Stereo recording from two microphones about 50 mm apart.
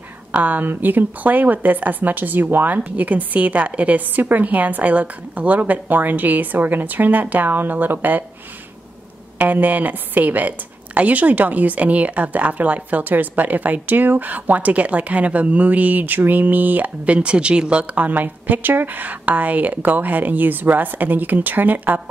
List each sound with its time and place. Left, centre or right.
0.3 s a woman's voice: right
9.4 s a woman's voice: right